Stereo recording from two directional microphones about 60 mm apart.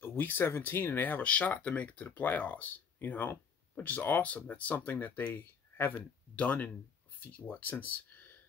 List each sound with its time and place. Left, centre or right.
0.0 s speech: left